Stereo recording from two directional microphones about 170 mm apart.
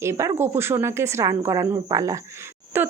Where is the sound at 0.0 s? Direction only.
15° right (ahead or behind).